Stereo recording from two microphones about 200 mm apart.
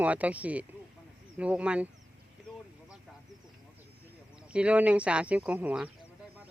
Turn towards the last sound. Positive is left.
turn(degrees=-10)  # may be behind; listen again after turning